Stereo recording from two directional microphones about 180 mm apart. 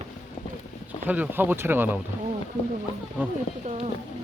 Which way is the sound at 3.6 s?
40° right (ahead or behind).